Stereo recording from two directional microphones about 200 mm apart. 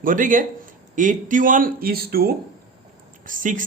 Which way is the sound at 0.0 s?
40° right (ahead or behind).